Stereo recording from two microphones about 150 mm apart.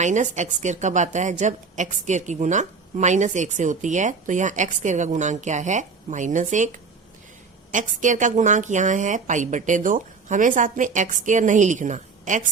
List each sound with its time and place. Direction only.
0.0 s a woman's voice: 55° right (ahead or behind)